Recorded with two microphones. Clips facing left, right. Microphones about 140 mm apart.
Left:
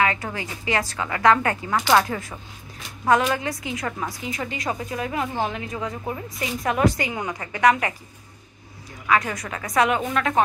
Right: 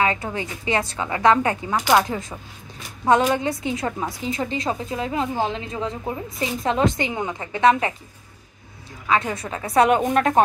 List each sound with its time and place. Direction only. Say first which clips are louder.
0.0 s a woman's voice: right 1 dB; 25° right (ahead or behind)
9.0 s a woman's voice: even; 25° right (ahead or behind)